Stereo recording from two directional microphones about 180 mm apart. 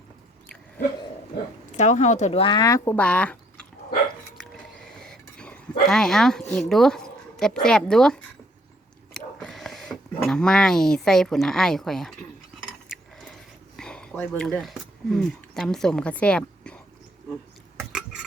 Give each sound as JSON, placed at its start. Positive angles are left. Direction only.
{"t": 1.7, "sound": "speech", "side_deg": 40}
{"t": 4.4, "sound": "a sound", "side_deg": 5}
{"t": 9.1, "sound": "speech", "side_deg": 0}
{"t": 13.7, "sound": "speech", "side_deg": 5}